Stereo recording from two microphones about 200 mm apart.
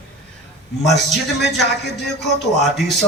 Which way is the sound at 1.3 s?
55° left (ahead or behind).